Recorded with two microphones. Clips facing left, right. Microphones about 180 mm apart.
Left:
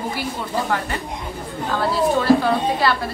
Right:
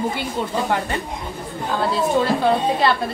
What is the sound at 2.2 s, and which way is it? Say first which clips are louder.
Speech: left 1 dB; 20° right (ahead or behind).